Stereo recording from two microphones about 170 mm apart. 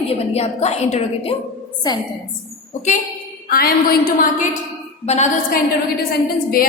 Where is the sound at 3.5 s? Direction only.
60° left (ahead or behind).